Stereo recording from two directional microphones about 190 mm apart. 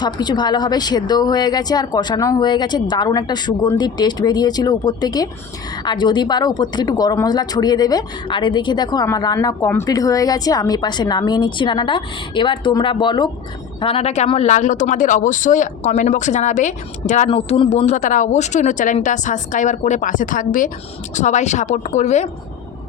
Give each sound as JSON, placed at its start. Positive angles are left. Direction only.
{"t": 0.0, "sound": "speech", "side_deg": 20}